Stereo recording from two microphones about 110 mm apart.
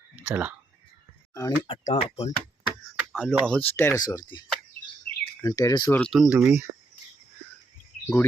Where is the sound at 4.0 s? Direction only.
35° left (ahead or behind).